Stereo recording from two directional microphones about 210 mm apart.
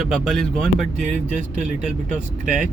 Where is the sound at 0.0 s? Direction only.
Centre (ahead or behind).